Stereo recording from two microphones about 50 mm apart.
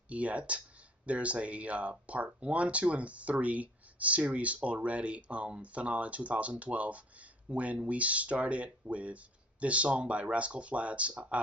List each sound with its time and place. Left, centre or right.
0.1 s speech: right